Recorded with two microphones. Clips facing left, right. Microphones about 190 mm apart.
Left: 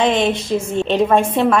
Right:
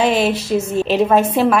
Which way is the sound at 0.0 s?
5° right (ahead or behind).